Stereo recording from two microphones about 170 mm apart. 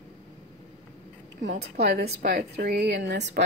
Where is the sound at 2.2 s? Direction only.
70° right (ahead or behind); by 3.4 s 90° right.